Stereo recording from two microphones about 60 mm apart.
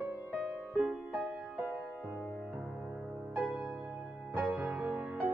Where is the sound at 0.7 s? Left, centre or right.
Centre.